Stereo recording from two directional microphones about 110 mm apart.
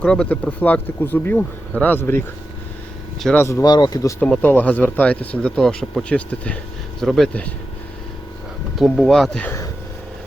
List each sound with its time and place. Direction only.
0.0 s speech: 10° left (ahead or behind)
3.3 s speech: 25° left (ahead or behind)
3.7 s speech: 40° left (ahead or behind)
4.2 s speech: 15° left (ahead or behind)
7.0 s speech: centre (ahead or behind)
8.7 s speech: centre (ahead or behind)